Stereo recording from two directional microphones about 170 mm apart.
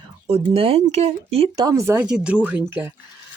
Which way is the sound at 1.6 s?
20° right (ahead or behind).